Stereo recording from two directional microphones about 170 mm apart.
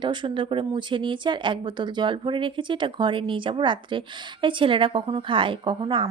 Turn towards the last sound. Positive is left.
turn(degrees=-30)  # may be behind; listen again after turning